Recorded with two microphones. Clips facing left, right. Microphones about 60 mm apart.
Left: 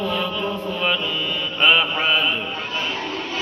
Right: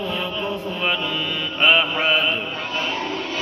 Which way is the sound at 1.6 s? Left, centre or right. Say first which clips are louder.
Even; right.